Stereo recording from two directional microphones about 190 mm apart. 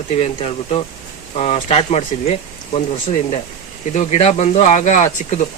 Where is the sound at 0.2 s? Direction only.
35° left (ahead or behind).